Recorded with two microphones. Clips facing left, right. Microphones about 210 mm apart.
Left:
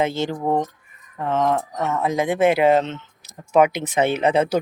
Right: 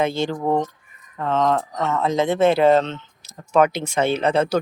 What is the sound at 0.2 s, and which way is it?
Speech, 15° left (ahead or behind).